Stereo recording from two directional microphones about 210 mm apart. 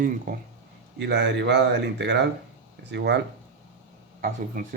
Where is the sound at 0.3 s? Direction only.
40° right (ahead or behind).